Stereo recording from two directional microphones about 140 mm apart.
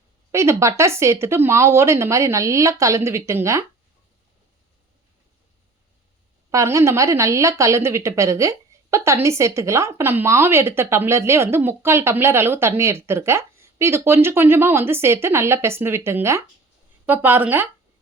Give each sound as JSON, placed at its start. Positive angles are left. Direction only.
{"t": 0.3, "sound": "a woman's voice", "side_deg": -20}
{"t": 6.5, "sound": "a woman's voice", "side_deg": -20}